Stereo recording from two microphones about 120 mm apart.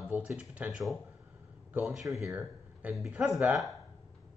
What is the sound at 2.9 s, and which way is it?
Speech, 10° right (ahead or behind).